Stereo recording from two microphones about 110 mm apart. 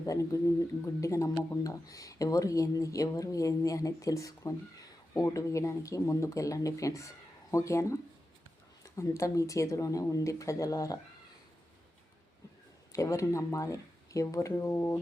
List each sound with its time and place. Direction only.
0.0 s speech: 30° left (ahead or behind)
12.9 s speech: 30° left (ahead or behind)